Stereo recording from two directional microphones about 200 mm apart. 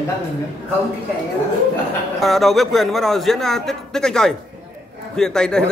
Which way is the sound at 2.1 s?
Centre (ahead or behind).